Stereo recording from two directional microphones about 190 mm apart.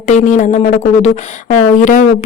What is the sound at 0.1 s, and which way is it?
Speech, 40° left (ahead or behind).